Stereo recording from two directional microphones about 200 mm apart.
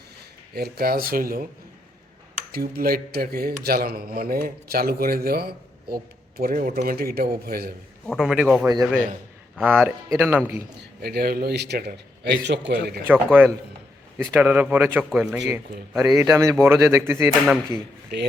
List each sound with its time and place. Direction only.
0.5 s speech: 50° right (ahead or behind)
2.5 s speech: 50° right (ahead or behind)
8.0 s a man's voice: centre (ahead or behind)
8.6 s a man's voice: 20° right (ahead or behind)
9.6 s speech: 5° right (ahead or behind)
11.0 s speech: 50° right (ahead or behind)
13.1 s speech: 10° right (ahead or behind)